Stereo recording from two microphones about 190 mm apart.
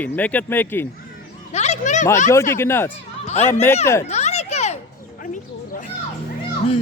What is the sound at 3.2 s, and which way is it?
Speech, 35° left (ahead or behind).